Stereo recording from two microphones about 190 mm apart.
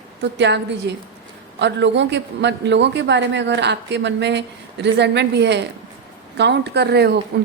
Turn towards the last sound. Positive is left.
turn(degrees=-60)  # may be behind; listen again after turning